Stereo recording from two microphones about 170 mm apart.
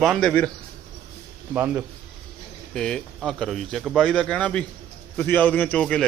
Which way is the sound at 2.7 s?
5° left (ahead or behind).